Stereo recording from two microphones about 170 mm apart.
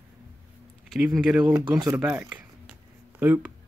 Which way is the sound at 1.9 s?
10° right (ahead or behind).